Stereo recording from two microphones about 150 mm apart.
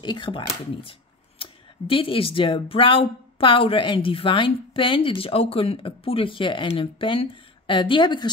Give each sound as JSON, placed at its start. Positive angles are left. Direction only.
{"t": 0.0, "sound": "speech", "side_deg": 30}